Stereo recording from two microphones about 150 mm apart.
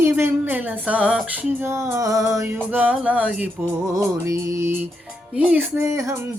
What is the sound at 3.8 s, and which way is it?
Music, 20° right (ahead or behind).